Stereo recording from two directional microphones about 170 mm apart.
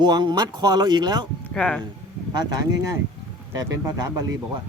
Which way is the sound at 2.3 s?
25° right (ahead or behind).